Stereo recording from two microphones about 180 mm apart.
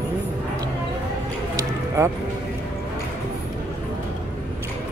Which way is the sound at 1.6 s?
15° right (ahead or behind).